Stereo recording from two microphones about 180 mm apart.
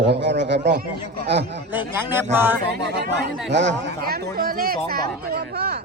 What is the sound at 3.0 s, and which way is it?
A man's voice, 70° right (ahead or behind).